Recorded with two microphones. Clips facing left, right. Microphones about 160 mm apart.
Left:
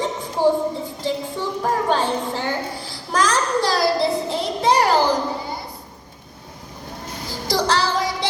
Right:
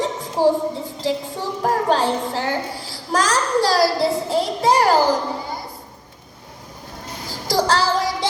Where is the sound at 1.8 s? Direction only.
35° right (ahead or behind).